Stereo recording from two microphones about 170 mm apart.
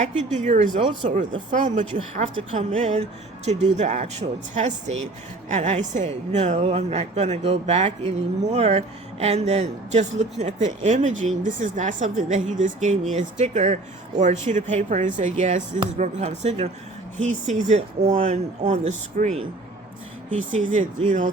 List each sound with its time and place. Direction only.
0.0 s speech: 45° right (ahead or behind)
20.5 s speech: 50° right (ahead or behind)